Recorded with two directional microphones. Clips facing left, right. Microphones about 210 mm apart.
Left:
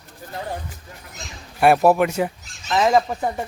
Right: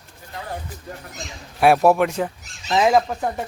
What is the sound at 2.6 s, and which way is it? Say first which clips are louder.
Speech: right 1 dB; 15° right (ahead or behind).